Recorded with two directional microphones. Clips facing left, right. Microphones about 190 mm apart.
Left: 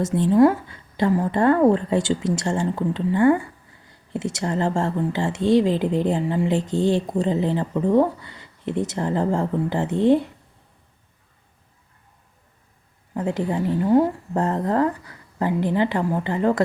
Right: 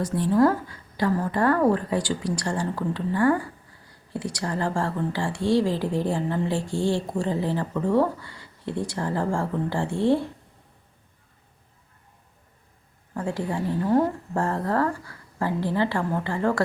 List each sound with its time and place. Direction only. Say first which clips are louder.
0.0 s a woman's voice: left 4 dB; 20° left (ahead or behind)
13.1 s a woman's voice: left 4 dB; 20° left (ahead or behind)